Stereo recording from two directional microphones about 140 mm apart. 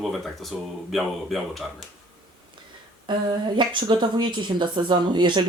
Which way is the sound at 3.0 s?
35° right (ahead or behind).